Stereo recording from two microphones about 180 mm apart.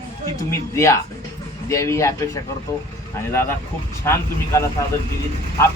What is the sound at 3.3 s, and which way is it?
A man's voice, 15° left (ahead or behind).